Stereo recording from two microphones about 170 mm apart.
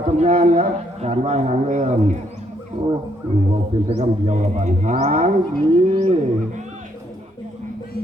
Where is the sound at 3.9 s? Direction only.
45° right (ahead or behind).